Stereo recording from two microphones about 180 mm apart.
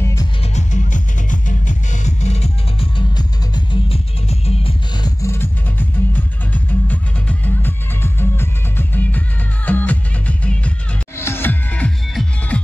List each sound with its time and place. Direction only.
0.0 s music: 20° left (ahead or behind)
0.4 s music: 40° left (ahead or behind)
3.2 s music: 25° left (ahead or behind); by 12.5 s 5° left (ahead or behind)